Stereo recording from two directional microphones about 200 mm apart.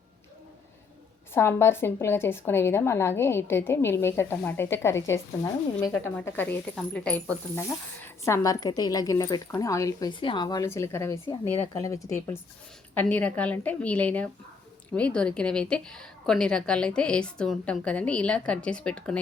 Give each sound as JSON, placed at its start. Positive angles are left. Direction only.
{"t": 1.3, "sound": "a woman's voice", "side_deg": 10}